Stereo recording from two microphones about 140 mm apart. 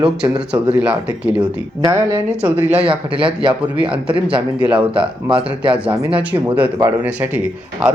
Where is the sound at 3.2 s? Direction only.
40° right (ahead or behind).